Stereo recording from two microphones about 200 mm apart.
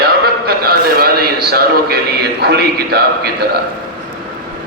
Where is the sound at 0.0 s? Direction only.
50° right (ahead or behind).